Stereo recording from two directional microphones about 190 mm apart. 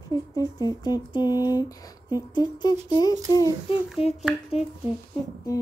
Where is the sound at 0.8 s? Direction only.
20° left (ahead or behind).